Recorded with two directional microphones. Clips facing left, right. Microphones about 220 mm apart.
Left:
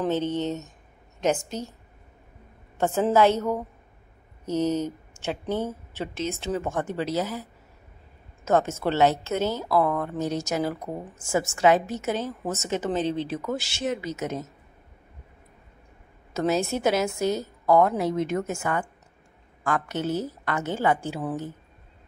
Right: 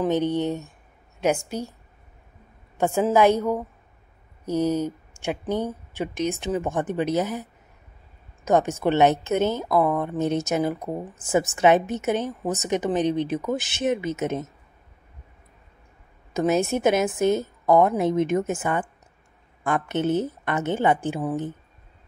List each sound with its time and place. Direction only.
0.0 s speech: 15° right (ahead or behind)
2.8 s speech: 15° right (ahead or behind)
8.5 s a woman's voice: 15° right (ahead or behind)
16.3 s a woman's voice: 15° right (ahead or behind)